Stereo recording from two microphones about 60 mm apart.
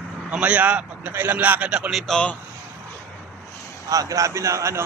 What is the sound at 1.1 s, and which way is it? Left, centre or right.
Speech, right.